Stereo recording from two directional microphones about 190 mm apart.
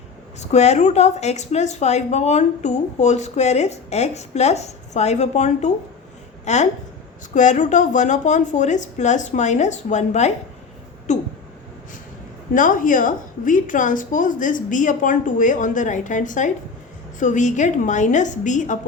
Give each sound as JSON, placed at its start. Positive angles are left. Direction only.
{"t": 0.3, "sound": "a woman's voice", "side_deg": 35}
{"t": 12.5, "sound": "a woman's voice", "side_deg": 45}